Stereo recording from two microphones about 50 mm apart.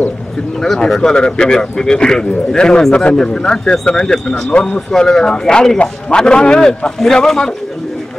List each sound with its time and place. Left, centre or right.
0.6 s speech: centre